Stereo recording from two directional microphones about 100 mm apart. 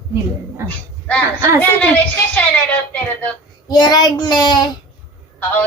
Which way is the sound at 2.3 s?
15° left (ahead or behind).